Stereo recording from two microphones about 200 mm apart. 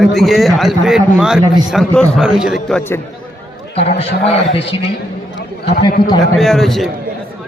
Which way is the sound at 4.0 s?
30° left (ahead or behind).